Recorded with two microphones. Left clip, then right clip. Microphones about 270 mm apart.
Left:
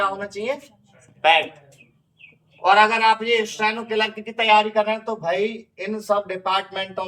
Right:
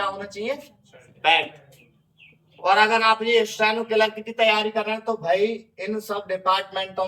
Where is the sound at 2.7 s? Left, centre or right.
Centre.